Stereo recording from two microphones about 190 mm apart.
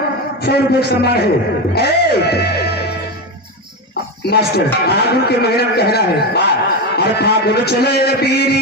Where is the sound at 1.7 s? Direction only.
60° left (ahead or behind).